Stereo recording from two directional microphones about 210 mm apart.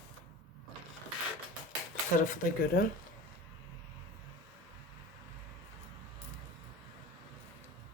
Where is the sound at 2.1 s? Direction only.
40° left (ahead or behind).